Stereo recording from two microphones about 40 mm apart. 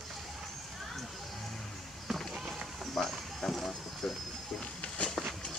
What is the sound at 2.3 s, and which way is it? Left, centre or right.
Run, centre.